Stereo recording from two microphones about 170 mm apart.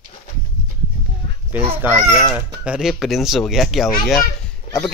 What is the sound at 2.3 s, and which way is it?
Speech, 5° right (ahead or behind).